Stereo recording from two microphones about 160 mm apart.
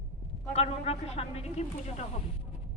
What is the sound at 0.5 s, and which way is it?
A man's voice, 40° left (ahead or behind).